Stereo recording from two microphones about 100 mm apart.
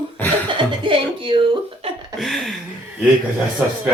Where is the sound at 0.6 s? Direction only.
60° right (ahead or behind).